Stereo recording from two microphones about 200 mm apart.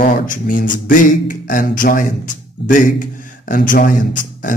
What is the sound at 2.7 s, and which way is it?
A man's voice, 40° left (ahead or behind).